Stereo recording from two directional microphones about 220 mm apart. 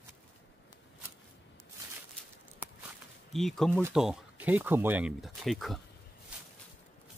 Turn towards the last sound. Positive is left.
turn(degrees=0)  # may be behind; listen again after turning